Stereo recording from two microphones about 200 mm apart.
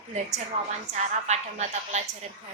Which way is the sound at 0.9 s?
35° right (ahead or behind).